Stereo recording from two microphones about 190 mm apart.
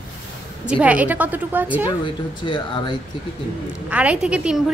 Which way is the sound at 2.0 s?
25° left (ahead or behind).